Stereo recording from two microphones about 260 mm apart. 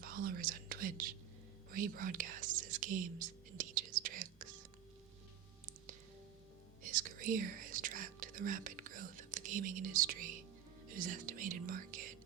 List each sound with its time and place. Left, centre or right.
0.0 s speech: right
1.7 s whispering: right
5.6 s music: right
6.8 s whispering: right
10.9 s speech: right